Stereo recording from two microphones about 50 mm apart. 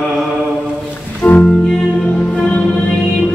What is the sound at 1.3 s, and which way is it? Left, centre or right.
Music, left.